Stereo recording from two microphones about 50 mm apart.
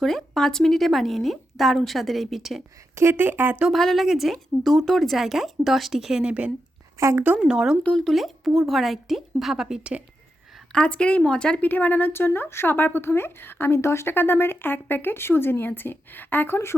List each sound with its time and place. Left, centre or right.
0.0 s a woman's voice: centre
2.9 s speech: right
3.2 s speech: right
3.7 s a woman's voice: centre
4.0 s speech: centre
4.6 s speech: centre
5.1 s a woman's voice: centre
6.2 s a woman's voice: right
7.0 s a woman's voice: right
7.4 s speech: centre
8.1 s a woman's voice: centre
10.7 s a woman's voice: left
11.6 s speech: left